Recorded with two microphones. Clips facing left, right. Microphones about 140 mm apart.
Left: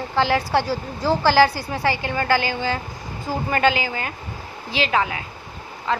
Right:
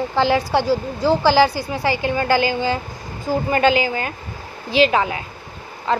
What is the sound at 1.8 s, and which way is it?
Speech, 30° right (ahead or behind).